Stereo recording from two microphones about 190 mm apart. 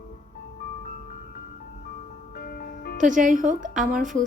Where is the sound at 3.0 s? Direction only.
40° right (ahead or behind).